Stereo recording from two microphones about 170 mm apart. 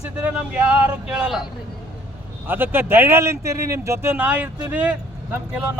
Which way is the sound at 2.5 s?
10° right (ahead or behind).